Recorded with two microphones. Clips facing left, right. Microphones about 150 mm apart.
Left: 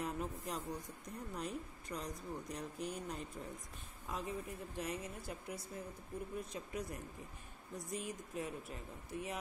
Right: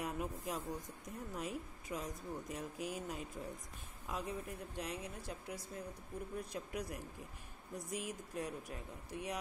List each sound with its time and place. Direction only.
0.0 s speech: centre (ahead or behind)